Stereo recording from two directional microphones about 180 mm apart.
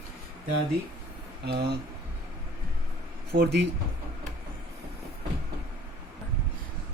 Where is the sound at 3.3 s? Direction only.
65° right (ahead or behind).